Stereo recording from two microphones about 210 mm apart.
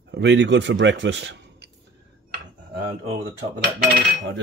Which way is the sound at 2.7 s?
25° right (ahead or behind).